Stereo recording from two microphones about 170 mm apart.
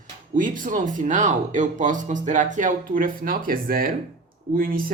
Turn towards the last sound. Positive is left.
turn(degrees=-55)  # may be behind; listen again after turning